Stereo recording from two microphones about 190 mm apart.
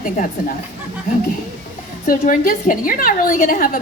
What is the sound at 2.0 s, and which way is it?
A woman's voice, 45° left (ahead or behind).